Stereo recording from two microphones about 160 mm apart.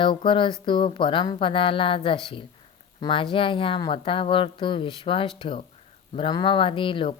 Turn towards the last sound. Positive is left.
turn(degrees=30)  # may be behind; listen again after turning